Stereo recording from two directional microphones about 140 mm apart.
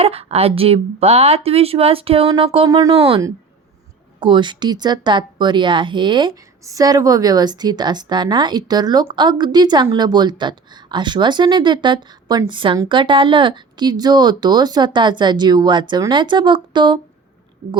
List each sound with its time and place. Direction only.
0.0 s speech: 45° right (ahead or behind)
2.6 s speech: 25° right (ahead or behind)
2.9 s speech: 45° right (ahead or behind)
4.2 s speech: 35° right (ahead or behind)